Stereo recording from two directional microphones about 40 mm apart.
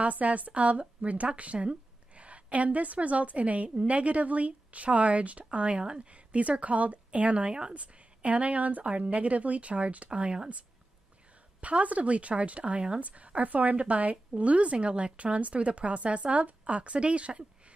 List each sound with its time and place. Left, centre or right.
0.0 s speech: right
11.6 s speech: right